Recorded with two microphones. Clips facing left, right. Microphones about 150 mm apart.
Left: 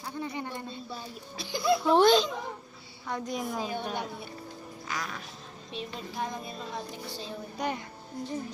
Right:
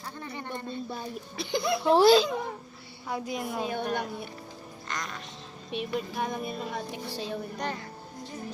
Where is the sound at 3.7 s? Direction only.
55° right (ahead or behind).